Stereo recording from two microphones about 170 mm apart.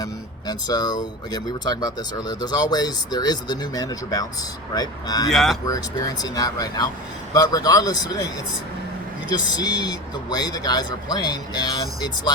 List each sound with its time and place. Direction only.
0.0 s a sound: 25° left (ahead or behind)
1.3 s speech: 25° left (ahead or behind)
5.3 s speech: centre (ahead or behind)
5.6 s speech: 20° left (ahead or behind)
9.3 s speech: 25° left (ahead or behind)